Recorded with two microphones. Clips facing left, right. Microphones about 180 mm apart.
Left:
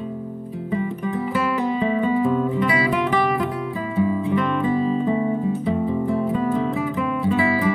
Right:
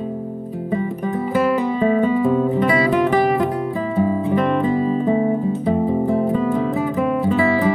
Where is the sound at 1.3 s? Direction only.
40° right (ahead or behind).